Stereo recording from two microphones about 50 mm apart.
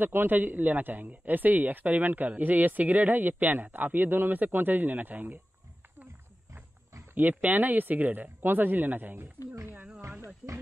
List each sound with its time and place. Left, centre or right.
0.0 s a man's voice: right
7.2 s a man's voice: right
10.2 s speech: right